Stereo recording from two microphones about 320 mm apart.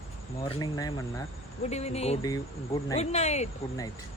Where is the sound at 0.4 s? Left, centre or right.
Centre.